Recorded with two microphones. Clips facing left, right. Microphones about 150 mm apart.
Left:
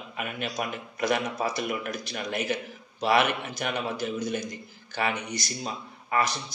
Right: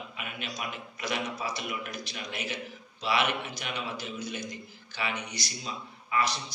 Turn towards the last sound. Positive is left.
turn(degrees=50)  # may be behind; listen again after turning